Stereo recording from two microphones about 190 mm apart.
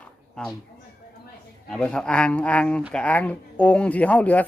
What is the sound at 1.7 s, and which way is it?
Speech, 5° left (ahead or behind).